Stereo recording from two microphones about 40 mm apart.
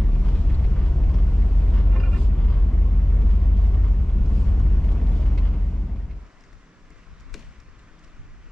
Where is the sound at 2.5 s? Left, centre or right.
Centre.